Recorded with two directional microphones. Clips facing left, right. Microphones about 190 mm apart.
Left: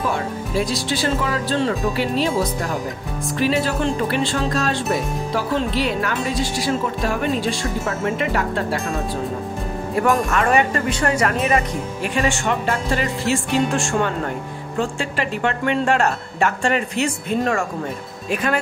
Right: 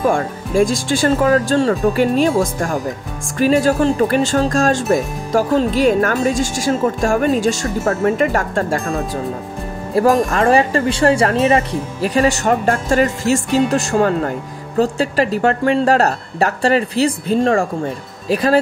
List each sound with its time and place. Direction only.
0.0 s speech: 50° right (ahead or behind)
9.9 s speech: 30° right (ahead or behind)